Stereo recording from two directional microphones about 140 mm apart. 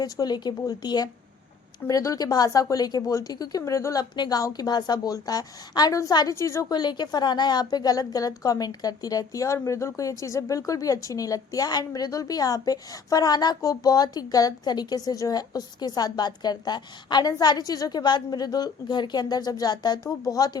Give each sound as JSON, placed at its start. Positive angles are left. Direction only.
{"t": 0.0, "sound": "a woman's voice", "side_deg": 30}